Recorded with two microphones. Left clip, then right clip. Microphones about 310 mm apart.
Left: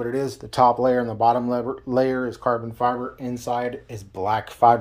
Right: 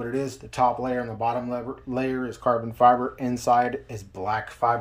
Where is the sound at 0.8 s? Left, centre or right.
Left.